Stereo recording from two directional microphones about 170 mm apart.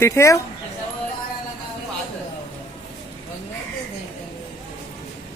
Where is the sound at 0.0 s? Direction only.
15° left (ahead or behind).